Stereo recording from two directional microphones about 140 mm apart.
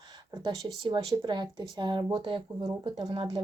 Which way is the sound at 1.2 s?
30° right (ahead or behind).